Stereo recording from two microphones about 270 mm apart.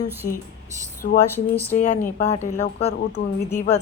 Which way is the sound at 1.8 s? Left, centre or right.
Left.